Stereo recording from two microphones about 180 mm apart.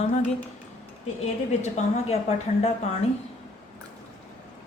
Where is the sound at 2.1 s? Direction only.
35° left (ahead or behind).